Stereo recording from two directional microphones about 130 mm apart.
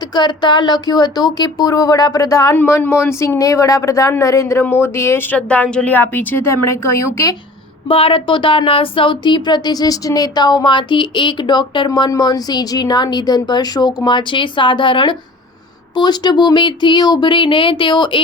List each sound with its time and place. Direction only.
0.1 s speech: 35° left (ahead or behind)
7.9 s speech: 45° left (ahead or behind)